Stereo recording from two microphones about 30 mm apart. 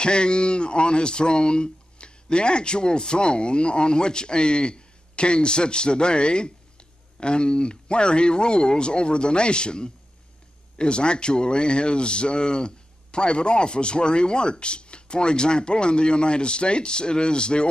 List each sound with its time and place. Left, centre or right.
0.0 s speech: left